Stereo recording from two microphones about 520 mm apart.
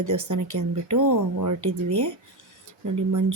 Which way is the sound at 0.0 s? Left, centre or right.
Right.